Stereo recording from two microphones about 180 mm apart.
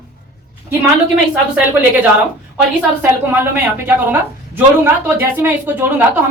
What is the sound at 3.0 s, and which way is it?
A woman's voice, 10° right (ahead or behind).